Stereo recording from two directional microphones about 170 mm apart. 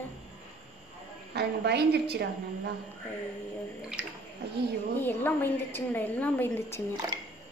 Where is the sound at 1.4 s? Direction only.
75° right (ahead or behind).